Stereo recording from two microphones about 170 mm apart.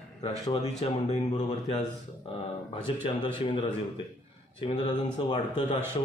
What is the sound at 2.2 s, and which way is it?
Speech, 30° left (ahead or behind).